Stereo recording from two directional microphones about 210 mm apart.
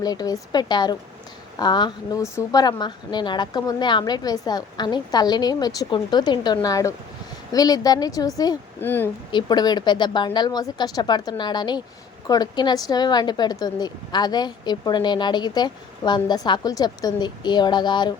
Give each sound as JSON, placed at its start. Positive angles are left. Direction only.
{"t": 0.0, "sound": "a woman's voice", "side_deg": 20}
{"t": 9.3, "sound": "a woman's voice", "side_deg": 20}